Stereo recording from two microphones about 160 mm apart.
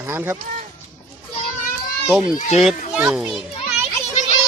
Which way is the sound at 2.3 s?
45° left (ahead or behind).